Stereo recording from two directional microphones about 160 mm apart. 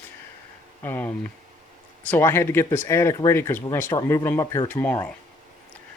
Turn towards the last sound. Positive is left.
turn(degrees=10)  # may be behind; listen again after turning